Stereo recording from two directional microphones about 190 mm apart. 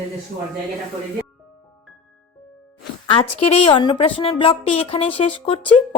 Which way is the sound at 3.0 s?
30° left (ahead or behind).